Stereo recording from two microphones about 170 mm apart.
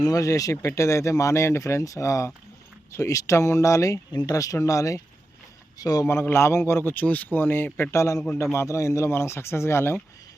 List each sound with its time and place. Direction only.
0.0 s a man's voice: 20° left (ahead or behind)